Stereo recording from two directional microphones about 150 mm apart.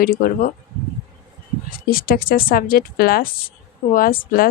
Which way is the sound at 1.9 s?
80° left.